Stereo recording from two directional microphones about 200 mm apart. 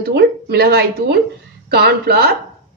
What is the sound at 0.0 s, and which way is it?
A woman's voice, 55° right (ahead or behind).